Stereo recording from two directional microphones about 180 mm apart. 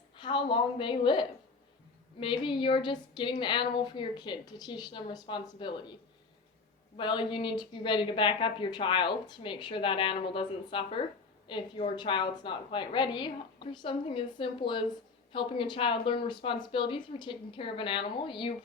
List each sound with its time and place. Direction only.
0.2 s a woman's voice: 25° left (ahead or behind)
6.9 s a woman's voice: 25° left (ahead or behind)